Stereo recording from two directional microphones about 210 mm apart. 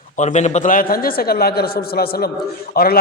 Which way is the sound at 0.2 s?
35° left (ahead or behind).